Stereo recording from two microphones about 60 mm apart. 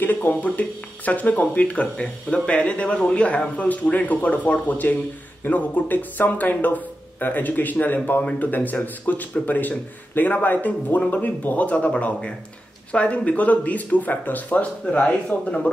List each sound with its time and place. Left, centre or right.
0.0 s speech: left